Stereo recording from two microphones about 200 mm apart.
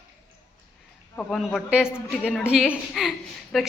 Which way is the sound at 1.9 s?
10° left (ahead or behind).